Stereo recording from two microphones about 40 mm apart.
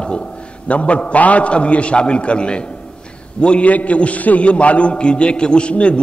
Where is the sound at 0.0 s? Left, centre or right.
Left.